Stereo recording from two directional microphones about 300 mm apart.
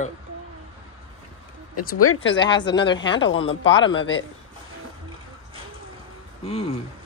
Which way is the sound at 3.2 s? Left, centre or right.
Left.